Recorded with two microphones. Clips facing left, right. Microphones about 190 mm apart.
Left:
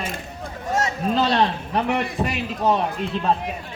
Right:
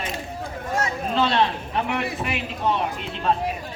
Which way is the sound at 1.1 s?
40° left (ahead or behind).